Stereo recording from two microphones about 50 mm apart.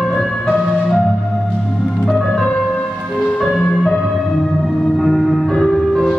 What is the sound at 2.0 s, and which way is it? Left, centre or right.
Music, centre.